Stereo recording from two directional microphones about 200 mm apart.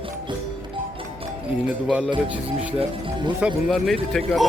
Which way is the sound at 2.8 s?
25° right (ahead or behind).